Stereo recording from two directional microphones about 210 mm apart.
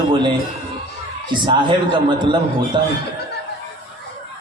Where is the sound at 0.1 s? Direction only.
20° right (ahead or behind).